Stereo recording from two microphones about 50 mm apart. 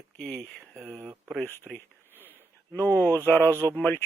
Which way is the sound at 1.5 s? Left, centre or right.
Left.